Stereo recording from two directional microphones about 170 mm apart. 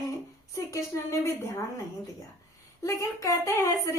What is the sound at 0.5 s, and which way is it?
A woman's voice, 15° left (ahead or behind).